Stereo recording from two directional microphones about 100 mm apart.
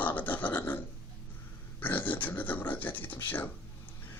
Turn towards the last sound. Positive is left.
turn(degrees=15)  # may be behind; listen again after turning